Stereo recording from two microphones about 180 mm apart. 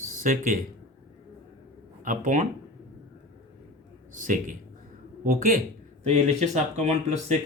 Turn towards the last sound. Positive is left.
turn(degrees=-40)  # may be behind; listen again after turning